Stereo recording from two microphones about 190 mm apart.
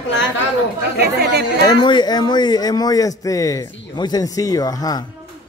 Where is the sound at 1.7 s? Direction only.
25° left (ahead or behind).